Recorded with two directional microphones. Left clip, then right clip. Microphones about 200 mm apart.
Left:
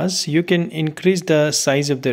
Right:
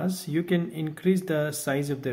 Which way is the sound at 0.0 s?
30° left (ahead or behind).